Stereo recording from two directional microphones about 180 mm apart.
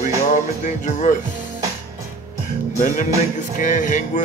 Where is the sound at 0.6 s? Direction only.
45° left (ahead or behind).